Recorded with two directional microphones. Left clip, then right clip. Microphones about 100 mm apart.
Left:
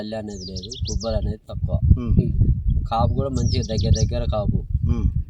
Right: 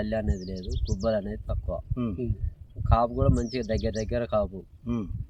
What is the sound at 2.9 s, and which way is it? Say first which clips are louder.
Speech: left 2 dB; 15° left (ahead or behind).